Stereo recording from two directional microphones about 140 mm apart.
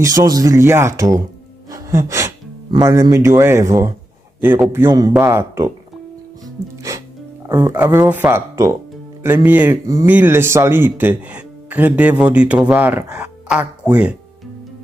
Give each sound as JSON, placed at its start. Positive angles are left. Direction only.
{"t": 0.0, "sound": "speech", "side_deg": -25}
{"t": 1.7, "sound": "gasp", "side_deg": -20}
{"t": 2.8, "sound": "speech", "side_deg": -25}
{"t": 6.4, "sound": "music", "side_deg": -25}
{"t": 7.4, "sound": "speech", "side_deg": -20}